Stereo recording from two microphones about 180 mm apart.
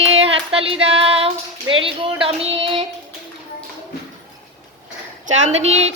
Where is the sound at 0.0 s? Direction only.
35° right (ahead or behind).